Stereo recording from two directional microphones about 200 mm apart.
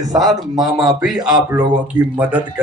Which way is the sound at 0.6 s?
Centre (ahead or behind).